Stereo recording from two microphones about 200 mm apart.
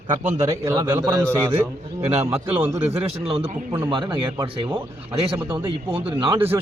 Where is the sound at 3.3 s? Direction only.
30° right (ahead or behind).